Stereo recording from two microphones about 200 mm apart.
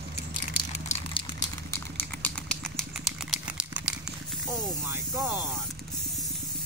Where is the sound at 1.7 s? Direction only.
10° left (ahead or behind).